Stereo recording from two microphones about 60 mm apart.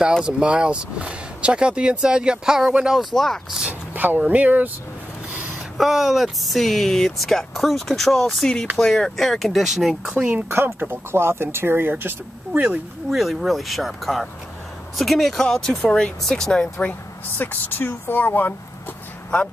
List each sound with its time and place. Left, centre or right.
0.2 s speech: centre
3.0 s speech: centre
3.6 s a sound: right
4.3 s speech: right
5.8 s speech: centre
10.3 s speech: right
13.1 s speech: centre
17.4 s speech: left